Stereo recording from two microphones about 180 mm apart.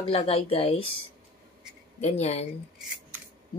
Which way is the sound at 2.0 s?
35° left (ahead or behind).